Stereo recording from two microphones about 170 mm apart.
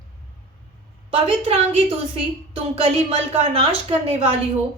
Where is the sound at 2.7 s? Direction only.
35° right (ahead or behind).